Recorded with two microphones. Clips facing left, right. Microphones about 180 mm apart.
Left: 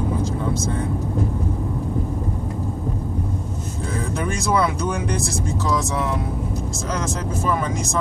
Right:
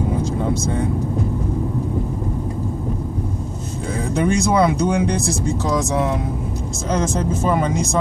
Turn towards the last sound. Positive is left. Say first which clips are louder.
# right 4 dB
turn(degrees=-20)  # may be behind; listen again after turning